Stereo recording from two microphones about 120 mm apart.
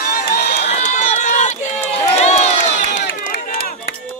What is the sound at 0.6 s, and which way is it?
Run, 80° left.